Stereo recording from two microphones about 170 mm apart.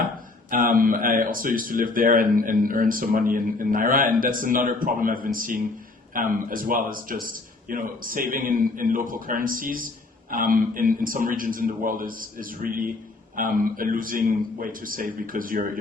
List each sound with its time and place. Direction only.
0.5 s a man's voice: 55° right (ahead or behind)